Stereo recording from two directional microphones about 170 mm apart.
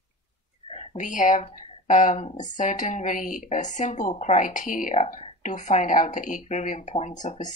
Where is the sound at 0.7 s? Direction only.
45° left (ahead or behind).